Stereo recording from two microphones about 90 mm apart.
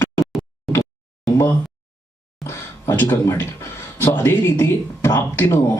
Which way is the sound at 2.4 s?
30° left (ahead or behind).